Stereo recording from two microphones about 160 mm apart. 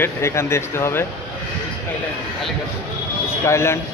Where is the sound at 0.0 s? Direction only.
15° left (ahead or behind).